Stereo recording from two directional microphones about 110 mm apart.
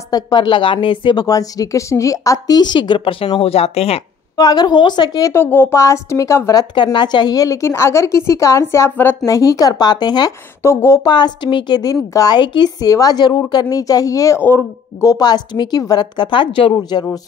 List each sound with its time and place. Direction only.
0.1 s speech: 45° left (ahead or behind)
1.2 s speech: 35° left (ahead or behind); by 4.0 s 65° left (ahead or behind)
4.4 s a woman's voice: 40° left (ahead or behind)
5.3 s a woman's voice: 20° left (ahead or behind); by 10.3 s 40° left (ahead or behind)
10.6 s a woman's voice: 25° left (ahead or behind)
11.1 s a woman's voice: 40° left (ahead or behind)
14.4 s a woman's voice: 20° left (ahead or behind)
15.0 s a woman's voice: 40° left (ahead or behind)